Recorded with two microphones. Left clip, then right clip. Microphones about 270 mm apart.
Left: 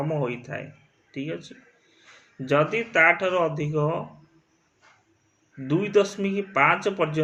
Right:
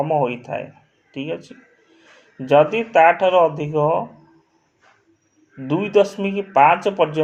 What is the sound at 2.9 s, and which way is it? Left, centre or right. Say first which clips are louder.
Speech: right 6 dB; right.